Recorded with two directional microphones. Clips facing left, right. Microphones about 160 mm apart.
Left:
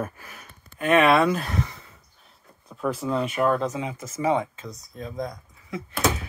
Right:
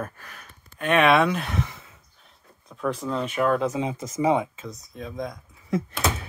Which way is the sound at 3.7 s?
20° right (ahead or behind).